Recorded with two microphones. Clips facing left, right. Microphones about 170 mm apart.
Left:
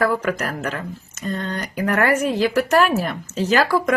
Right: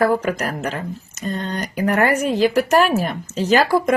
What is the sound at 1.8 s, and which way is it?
Speech, 25° right (ahead or behind).